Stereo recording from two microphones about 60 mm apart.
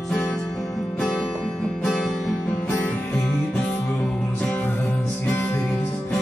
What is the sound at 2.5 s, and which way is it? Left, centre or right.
Music, left.